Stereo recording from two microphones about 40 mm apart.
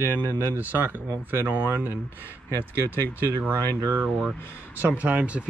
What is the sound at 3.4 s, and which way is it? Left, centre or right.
Speech, right.